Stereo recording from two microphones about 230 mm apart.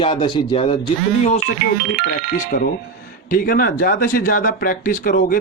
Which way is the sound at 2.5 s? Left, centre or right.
Left.